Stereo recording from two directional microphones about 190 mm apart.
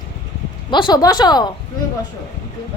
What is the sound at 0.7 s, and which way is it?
Speech, 25° left (ahead or behind).